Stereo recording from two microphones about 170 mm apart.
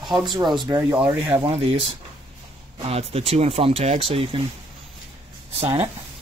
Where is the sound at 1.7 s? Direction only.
30° right (ahead or behind).